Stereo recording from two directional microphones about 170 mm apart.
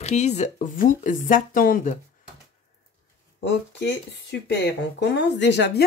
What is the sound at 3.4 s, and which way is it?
Speech, 90° left.